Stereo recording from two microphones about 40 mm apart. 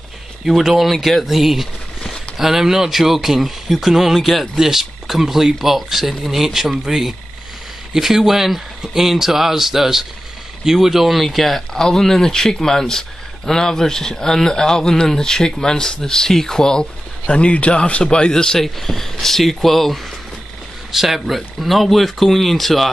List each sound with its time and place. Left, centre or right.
0.5 s speech: centre
0.9 s speech: centre
1.2 s speech: centre
17.3 s a man's voice: left
18.0 s a man's voice: centre
18.6 s speech: centre
20.9 s speech: centre
21.4 s speech: centre